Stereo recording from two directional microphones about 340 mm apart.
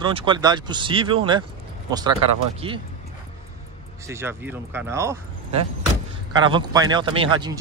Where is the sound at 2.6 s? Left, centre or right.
Centre.